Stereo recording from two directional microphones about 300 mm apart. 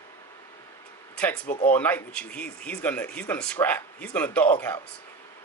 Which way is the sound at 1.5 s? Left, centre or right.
Left.